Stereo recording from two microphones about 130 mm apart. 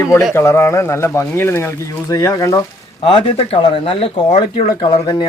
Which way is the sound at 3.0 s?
45° left (ahead or behind).